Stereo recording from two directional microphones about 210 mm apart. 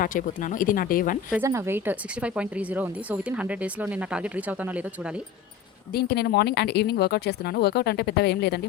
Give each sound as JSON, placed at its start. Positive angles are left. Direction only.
{"t": 0.0, "sound": "speech", "side_deg": 40}
{"t": 1.3, "sound": "speech", "side_deg": -10}
{"t": 5.9, "sound": "speech", "side_deg": 50}